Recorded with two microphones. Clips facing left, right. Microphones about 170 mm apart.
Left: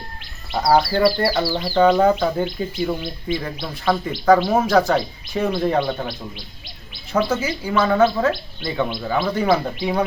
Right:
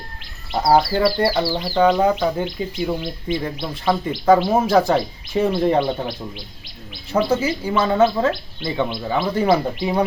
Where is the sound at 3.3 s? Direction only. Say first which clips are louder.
Right 1 dB; 25° right (ahead or behind).